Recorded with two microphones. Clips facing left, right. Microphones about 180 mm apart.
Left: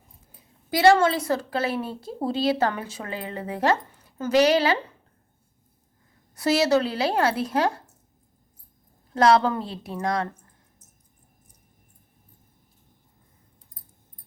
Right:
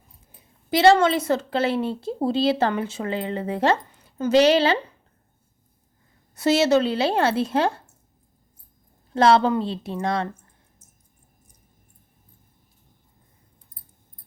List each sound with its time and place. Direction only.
0.7 s a woman's voice: 25° right (ahead or behind)
6.3 s a woman's voice: 25° right (ahead or behind)
9.1 s a woman's voice: 25° right (ahead or behind)